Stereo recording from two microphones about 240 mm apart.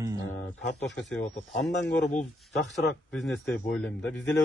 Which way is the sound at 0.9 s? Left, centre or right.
Centre.